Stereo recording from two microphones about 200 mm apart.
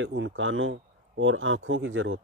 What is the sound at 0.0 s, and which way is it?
Speech, 70° right (ahead or behind).